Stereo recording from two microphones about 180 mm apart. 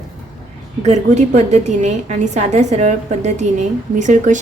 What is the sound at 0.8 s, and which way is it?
A woman's voice, 40° right (ahead or behind).